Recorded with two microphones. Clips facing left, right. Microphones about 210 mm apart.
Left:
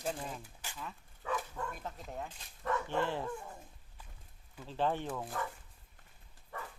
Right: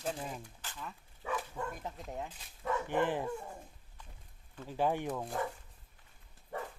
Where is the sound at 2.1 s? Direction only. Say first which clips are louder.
Right 1 dB; 5° right (ahead or behind).